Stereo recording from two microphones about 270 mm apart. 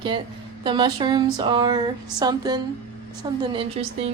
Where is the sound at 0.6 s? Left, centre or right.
Centre.